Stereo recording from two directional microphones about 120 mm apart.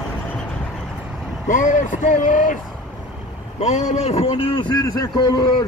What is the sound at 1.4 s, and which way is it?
Speech, 90° left.